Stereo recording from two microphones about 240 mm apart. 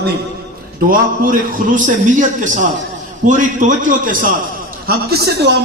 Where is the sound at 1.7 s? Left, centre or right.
Right.